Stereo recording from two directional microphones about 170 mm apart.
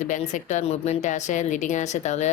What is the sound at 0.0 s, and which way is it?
Speech, 45° left (ahead or behind).